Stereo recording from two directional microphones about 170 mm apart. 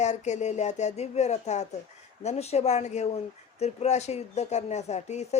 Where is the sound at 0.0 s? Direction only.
40° left (ahead or behind).